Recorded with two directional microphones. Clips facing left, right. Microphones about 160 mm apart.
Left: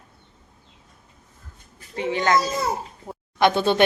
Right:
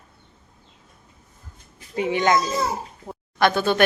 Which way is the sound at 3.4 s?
25° left (ahead or behind).